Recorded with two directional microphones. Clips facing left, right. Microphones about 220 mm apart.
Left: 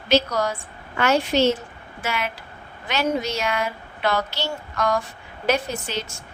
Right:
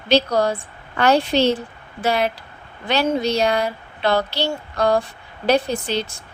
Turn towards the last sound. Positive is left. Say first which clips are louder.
# right 6 dB
turn(degrees=-35)  # may be behind; listen again after turning